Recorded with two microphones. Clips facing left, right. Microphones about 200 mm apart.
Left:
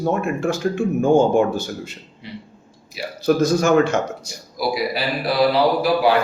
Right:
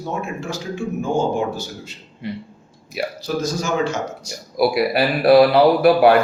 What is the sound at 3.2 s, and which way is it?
Speech, 55° left (ahead or behind).